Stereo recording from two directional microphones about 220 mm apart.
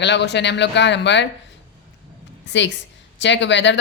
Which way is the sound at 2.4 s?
55° left (ahead or behind).